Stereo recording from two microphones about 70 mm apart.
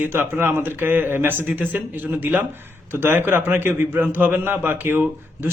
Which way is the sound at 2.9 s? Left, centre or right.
Right.